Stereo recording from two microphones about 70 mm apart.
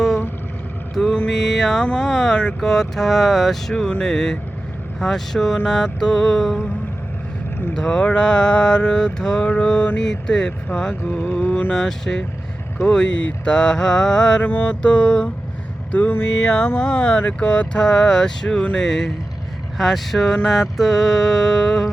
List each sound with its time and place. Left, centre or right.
0.9 s vehicle: centre
1.3 s speech: centre
7.7 s speech: centre
11.0 s music: left
11.7 s speech: centre
14.4 s speech: left
15.9 s music: left
16.2 s speech: centre